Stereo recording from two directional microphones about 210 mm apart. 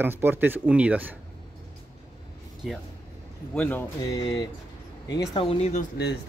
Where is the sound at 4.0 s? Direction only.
20° left (ahead or behind).